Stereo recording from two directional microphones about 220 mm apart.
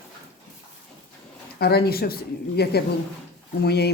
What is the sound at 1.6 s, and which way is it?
Speech, 45° left (ahead or behind).